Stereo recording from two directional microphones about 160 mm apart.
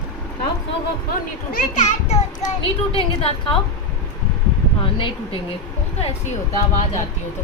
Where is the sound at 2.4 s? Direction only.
35° left (ahead or behind).